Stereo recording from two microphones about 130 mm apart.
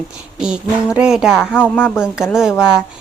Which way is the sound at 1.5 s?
15° left (ahead or behind).